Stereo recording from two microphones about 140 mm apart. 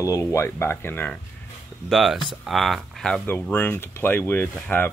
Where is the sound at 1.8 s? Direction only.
Centre (ahead or behind).